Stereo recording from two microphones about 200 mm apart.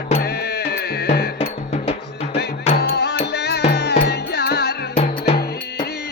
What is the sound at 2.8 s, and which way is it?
Music, 55° left (ahead or behind).